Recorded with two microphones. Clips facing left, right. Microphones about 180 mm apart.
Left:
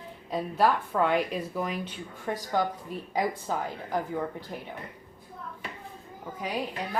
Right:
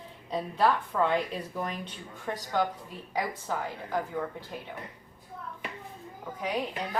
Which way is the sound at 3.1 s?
20° left (ahead or behind).